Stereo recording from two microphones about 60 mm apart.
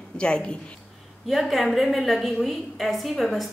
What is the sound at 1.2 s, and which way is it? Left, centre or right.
A woman's voice, centre.